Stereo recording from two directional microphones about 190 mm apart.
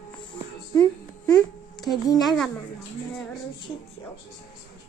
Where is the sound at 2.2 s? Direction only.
Centre (ahead or behind).